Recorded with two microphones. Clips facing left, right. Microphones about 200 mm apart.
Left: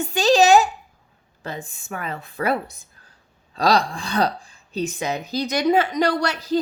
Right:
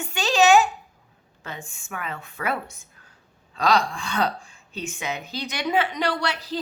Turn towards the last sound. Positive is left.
turn(degrees=45)  # may be behind; listen again after turning